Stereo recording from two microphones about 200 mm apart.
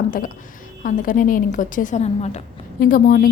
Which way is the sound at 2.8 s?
45° left (ahead or behind).